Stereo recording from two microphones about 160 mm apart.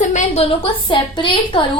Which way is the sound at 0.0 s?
50° left (ahead or behind).